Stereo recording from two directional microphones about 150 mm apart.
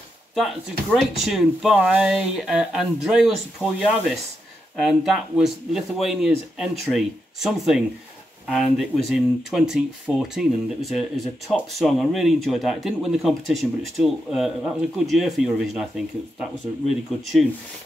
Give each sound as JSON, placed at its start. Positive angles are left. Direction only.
{"t": 0.4, "sound": "speech", "side_deg": 0}
{"t": 16.9, "sound": "speech", "side_deg": 0}